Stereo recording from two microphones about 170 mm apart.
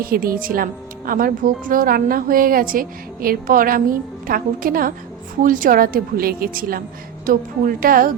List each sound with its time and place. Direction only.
0.0 s speech: 60° right (ahead or behind)